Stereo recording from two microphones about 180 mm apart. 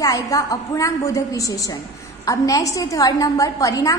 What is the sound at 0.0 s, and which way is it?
A woman's voice, 20° left (ahead or behind).